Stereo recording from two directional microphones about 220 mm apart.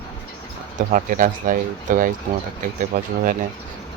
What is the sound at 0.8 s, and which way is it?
Speech, 40° right (ahead or behind).